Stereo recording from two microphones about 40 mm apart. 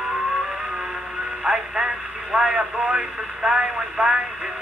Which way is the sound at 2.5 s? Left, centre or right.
Right.